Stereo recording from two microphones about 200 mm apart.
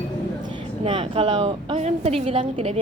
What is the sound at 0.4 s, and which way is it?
A woman's voice, 25° right (ahead or behind).